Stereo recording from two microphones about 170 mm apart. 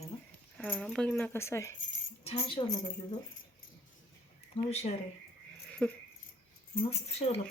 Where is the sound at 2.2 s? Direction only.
35° left (ahead or behind).